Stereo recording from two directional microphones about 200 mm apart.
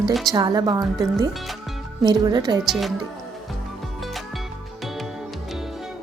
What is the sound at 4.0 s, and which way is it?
Music, centre (ahead or behind).